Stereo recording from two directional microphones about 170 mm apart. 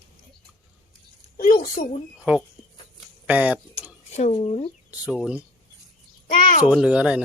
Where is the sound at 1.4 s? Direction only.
55° left (ahead or behind).